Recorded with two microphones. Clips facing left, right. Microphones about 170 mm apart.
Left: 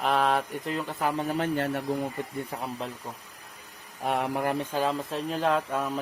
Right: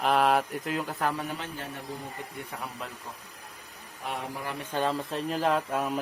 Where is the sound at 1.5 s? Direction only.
75° left (ahead or behind).